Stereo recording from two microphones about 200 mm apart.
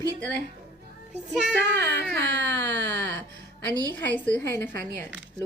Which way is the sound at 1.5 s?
60° right (ahead or behind).